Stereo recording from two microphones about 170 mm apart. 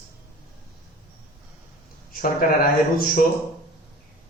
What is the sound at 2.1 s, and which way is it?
Speech, 55° left (ahead or behind).